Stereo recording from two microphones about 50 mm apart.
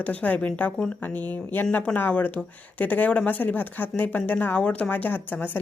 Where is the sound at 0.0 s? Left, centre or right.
Left.